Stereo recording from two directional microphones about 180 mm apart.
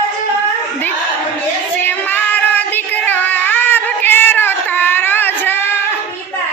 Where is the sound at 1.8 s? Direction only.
10° left (ahead or behind).